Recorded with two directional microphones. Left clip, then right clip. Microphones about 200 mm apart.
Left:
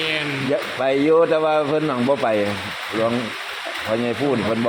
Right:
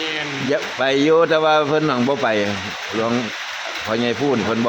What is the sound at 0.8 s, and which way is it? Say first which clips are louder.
Speech: right 1 dB; 20° right (ahead or behind).